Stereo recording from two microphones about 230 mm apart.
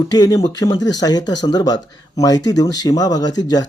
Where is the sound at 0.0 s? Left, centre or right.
Centre.